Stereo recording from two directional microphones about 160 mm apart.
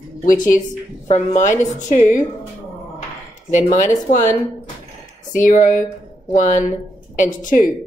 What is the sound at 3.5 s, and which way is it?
Speech, 50° left (ahead or behind).